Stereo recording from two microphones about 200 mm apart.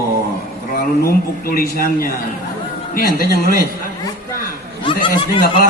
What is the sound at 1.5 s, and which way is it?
A man's voice, 45° left (ahead or behind).